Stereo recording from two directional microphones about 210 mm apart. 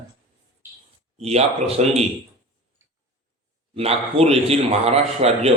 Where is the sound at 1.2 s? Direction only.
30° right (ahead or behind).